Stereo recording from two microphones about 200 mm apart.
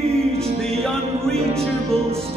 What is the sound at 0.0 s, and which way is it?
Music, 30° right (ahead or behind).